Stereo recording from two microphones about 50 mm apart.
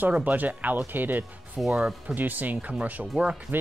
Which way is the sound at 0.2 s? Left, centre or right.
Right.